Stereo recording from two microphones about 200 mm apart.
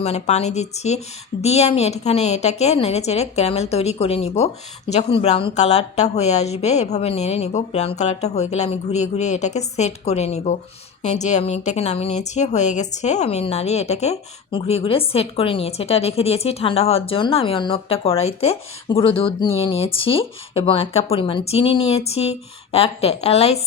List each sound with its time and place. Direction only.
0.0 s a woman's voice: 30° left (ahead or behind)